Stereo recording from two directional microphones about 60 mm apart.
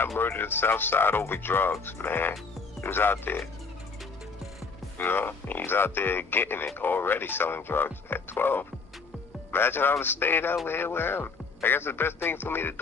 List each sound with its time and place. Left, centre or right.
0.2 s speech: left
4.9 s speech: left